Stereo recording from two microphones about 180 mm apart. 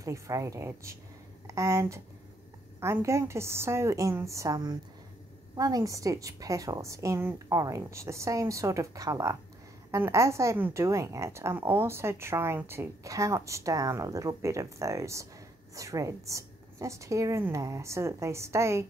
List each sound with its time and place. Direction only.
0.0 s a woman's voice: 20° right (ahead or behind)